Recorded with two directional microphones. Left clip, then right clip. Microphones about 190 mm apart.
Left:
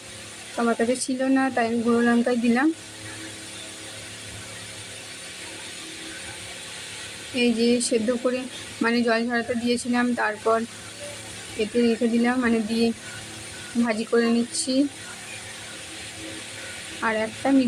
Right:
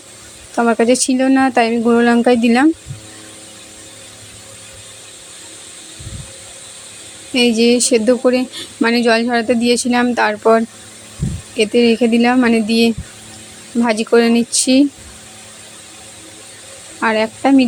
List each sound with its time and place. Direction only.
0.5 s speech: 45° right (ahead or behind)
7.3 s speech: 45° right (ahead or behind)
11.6 s speech: 45° right (ahead or behind)
17.0 s speech: 45° right (ahead or behind)